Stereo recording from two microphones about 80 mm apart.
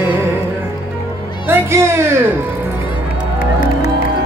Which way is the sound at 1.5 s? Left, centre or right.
Right.